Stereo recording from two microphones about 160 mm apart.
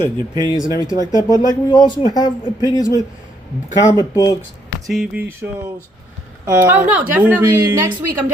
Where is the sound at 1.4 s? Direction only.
25° left (ahead or behind).